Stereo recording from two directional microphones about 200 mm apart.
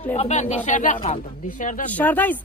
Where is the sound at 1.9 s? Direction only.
10° left (ahead or behind).